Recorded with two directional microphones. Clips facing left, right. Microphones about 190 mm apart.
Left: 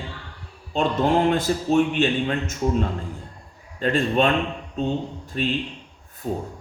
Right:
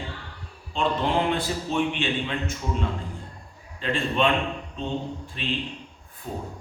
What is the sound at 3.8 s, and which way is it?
A man's voice, 45° left (ahead or behind).